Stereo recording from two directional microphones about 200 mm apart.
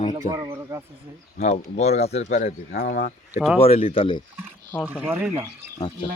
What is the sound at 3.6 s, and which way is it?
Speech, 30° left (ahead or behind).